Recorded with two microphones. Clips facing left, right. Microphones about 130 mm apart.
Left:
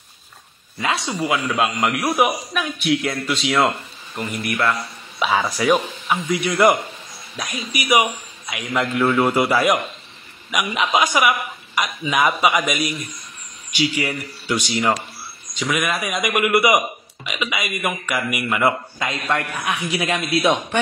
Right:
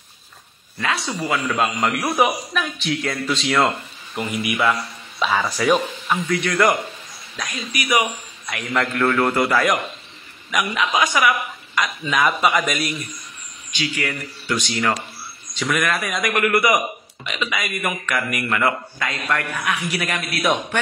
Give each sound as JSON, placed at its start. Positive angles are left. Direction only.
{"t": 0.7, "sound": "a man's voice", "side_deg": 25}
{"t": 1.4, "sound": "a man's voice", "side_deg": 5}
{"t": 4.2, "sound": "a man's voice", "side_deg": -5}
{"t": 5.2, "sound": "speech", "side_deg": 10}
{"t": 8.5, "sound": "a woman's voice", "side_deg": 5}
{"t": 12.3, "sound": "a man's voice", "side_deg": 5}
{"t": 13.7, "sound": "speech", "side_deg": 15}
{"t": 15.5, "sound": "a man's voice", "side_deg": 0}
{"t": 18.6, "sound": "a man's voice", "side_deg": 25}